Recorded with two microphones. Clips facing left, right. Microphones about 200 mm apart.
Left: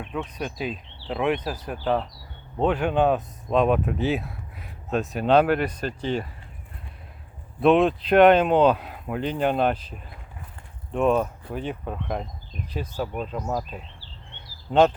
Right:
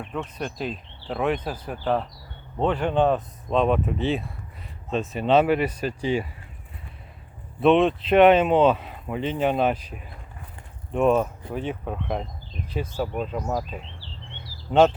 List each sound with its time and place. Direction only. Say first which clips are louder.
0.0 s speech: even; centre (ahead or behind)
7.6 s speech: even; centre (ahead or behind)
14.7 s speech: right 1 dB; 5° right (ahead or behind)